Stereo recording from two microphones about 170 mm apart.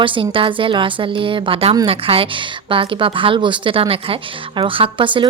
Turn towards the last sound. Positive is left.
turn(degrees=-30)  # may be behind; listen again after turning